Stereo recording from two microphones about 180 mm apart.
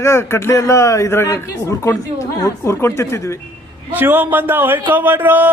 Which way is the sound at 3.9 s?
10° right (ahead or behind).